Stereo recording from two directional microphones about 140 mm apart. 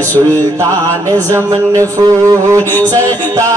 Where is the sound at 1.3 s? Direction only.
20° right (ahead or behind).